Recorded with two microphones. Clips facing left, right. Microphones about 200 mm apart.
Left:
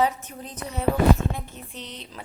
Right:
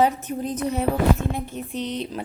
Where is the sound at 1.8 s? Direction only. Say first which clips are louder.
Right 13 dB; 70° right (ahead or behind).